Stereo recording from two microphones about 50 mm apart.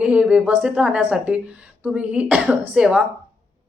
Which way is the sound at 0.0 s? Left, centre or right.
Right.